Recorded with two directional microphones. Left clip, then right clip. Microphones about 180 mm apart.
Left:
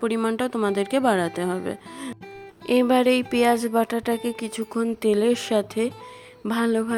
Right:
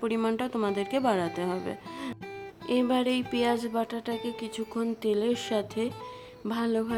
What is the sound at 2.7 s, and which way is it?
A woman's voice, 35° left (ahead or behind).